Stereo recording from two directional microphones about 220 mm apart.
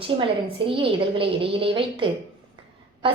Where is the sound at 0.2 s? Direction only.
25° right (ahead or behind).